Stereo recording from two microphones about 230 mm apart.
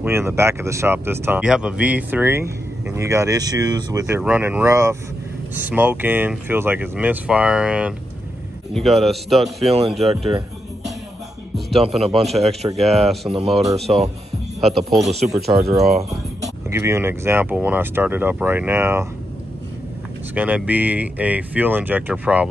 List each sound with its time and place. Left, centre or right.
0.0 s a man's voice: centre
12.2 s a man's voice: right
12.7 s a man's voice: centre
16.1 s speech: centre
20.3 s speech: centre